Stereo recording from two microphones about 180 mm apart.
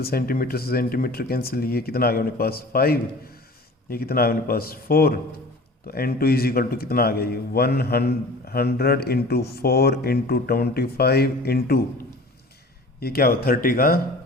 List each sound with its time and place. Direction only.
0.0 s speech: 55° left (ahead or behind)
13.0 s speech: 60° left (ahead or behind)